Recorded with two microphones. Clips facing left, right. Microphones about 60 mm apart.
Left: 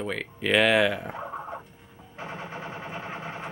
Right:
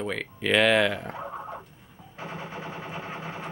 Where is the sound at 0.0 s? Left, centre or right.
Centre.